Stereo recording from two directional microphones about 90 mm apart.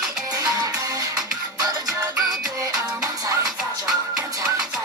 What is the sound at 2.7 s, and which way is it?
Music, 40° right (ahead or behind).